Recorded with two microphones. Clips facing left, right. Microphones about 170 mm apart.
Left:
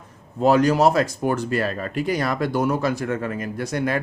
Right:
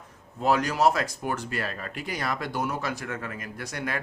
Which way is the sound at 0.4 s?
30° left (ahead or behind).